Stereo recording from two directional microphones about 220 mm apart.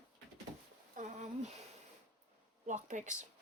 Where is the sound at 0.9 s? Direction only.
35° right (ahead or behind).